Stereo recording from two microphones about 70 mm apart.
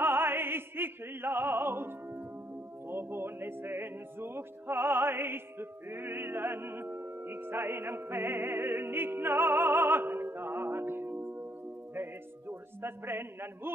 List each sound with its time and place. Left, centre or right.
0.0 s opera: right
2.9 s music: right